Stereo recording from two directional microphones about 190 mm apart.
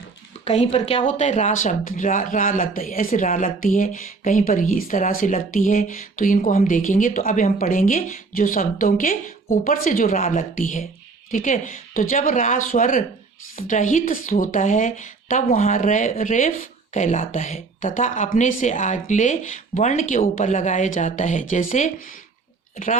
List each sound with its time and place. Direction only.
0.4 s a woman's voice: 35° left (ahead or behind)